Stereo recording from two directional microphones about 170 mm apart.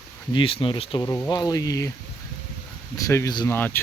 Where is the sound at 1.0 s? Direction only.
15° left (ahead or behind).